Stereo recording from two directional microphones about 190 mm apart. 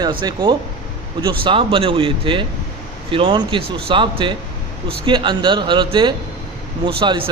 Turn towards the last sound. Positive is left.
turn(degrees=-25)  # may be behind; listen again after turning